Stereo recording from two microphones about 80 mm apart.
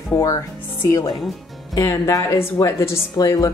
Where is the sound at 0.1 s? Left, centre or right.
Left.